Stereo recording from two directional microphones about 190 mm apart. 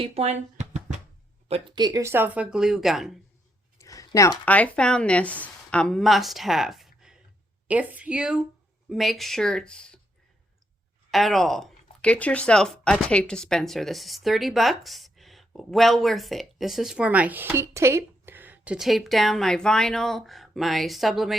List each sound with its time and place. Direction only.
0.0 s a sound: 30° right (ahead or behind)
1.5 s speech: 25° right (ahead or behind); by 3.1 s centre (ahead or behind)
3.8 s speech: 15° left (ahead or behind)
11.1 s speech: centre (ahead or behind)